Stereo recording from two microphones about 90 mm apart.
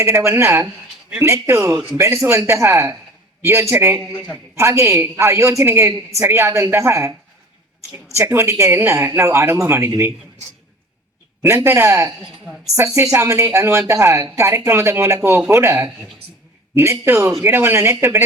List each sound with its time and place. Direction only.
0.0 s a woman's voice: 30° right (ahead or behind)
8.1 s a woman's voice: 30° right (ahead or behind)
11.4 s a woman's voice: 30° right (ahead or behind)